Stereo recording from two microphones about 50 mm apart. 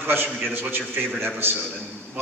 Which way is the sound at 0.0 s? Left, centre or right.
Right.